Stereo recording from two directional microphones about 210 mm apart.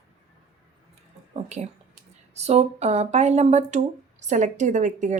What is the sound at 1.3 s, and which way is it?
A woman's voice, 35° right (ahead or behind).